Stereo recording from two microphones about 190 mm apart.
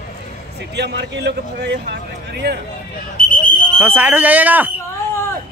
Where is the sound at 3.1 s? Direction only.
45° left (ahead or behind).